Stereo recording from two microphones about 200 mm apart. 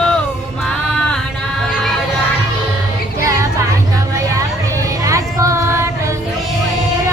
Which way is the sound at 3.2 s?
15° right (ahead or behind).